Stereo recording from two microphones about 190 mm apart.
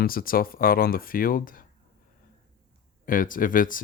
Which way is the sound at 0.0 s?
50° left (ahead or behind).